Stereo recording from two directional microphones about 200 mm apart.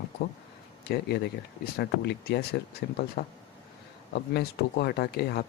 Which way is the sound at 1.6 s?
55° left (ahead or behind).